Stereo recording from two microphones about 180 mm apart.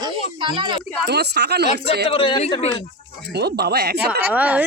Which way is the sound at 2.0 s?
30° left (ahead or behind).